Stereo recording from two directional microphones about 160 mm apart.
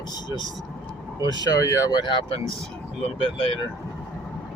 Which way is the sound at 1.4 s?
20° left (ahead or behind).